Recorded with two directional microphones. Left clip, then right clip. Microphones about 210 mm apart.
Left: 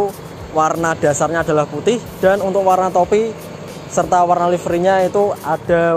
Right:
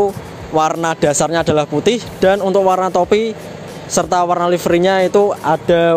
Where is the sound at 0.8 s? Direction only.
70° right (ahead or behind).